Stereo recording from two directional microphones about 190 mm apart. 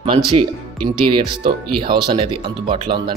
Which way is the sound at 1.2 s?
25° right (ahead or behind).